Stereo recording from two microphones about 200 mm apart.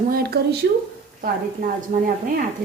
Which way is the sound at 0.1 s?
50° right (ahead or behind).